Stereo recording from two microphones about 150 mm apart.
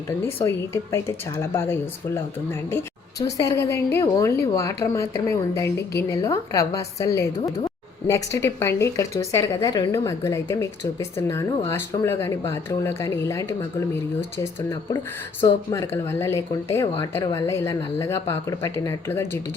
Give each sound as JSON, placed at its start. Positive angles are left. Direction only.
{"t": 0.4, "sound": "speech", "side_deg": 20}